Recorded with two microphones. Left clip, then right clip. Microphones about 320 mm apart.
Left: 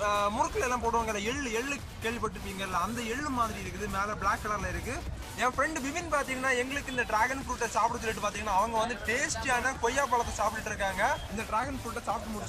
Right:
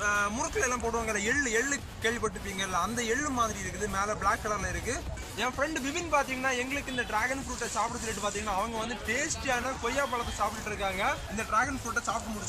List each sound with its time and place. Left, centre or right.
0.0 s speech: centre
5.4 s speech: left
11.3 s speech: centre